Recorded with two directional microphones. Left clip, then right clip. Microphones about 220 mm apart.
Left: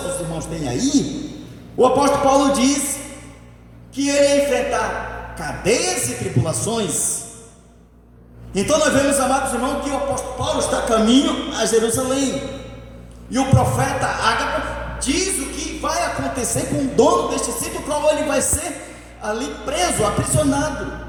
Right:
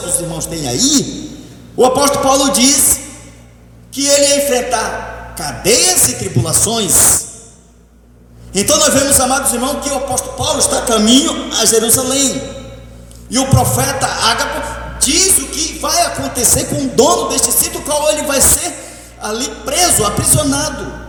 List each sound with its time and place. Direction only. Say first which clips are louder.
0.3 s a man's voice: right 6 dB; 45° right (ahead or behind)
3.9 s a man's voice: right 4 dB; 45° right (ahead or behind)
8.5 s a man's voice: right 4 dB; 45° right (ahead or behind)
13.3 s a man's voice: right 4 dB; 45° right (ahead or behind)